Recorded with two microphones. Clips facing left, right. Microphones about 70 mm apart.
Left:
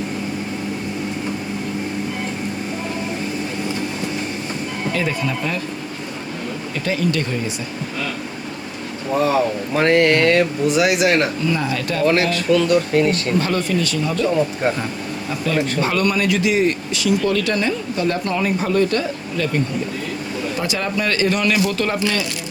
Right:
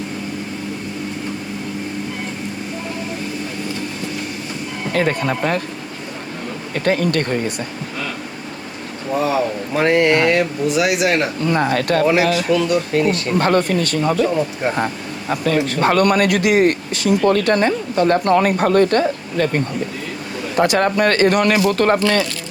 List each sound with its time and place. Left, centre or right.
4.9 s a man's voice: right
6.7 s a man's voice: right
9.2 s speech: centre
11.3 s a man's voice: right
12.0 s speech: centre
13.4 s a man's voice: right
14.6 s speech: centre
15.3 s a man's voice: right
20.6 s a man's voice: right